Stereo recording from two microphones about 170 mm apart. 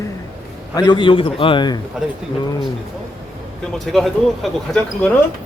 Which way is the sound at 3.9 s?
Centre (ahead or behind).